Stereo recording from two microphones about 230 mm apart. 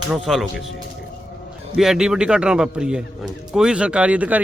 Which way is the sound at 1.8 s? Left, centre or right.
Centre.